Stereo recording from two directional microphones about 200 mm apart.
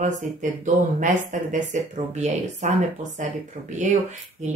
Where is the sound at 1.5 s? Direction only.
40° right (ahead or behind).